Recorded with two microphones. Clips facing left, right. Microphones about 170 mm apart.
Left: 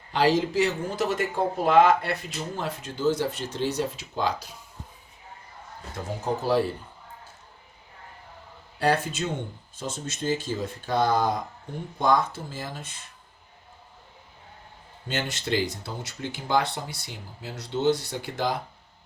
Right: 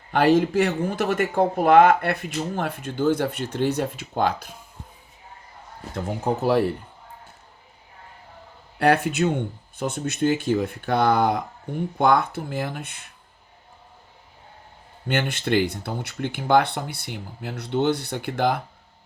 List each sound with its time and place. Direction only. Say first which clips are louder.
0.1 s speech: right 4 dB; 55° right (ahead or behind)
6.2 s speech: right 3 dB; 60° right (ahead or behind)
8.8 s speech: right 5 dB; 60° right (ahead or behind)
15.0 s speech: right 6 dB; 60° right (ahead or behind)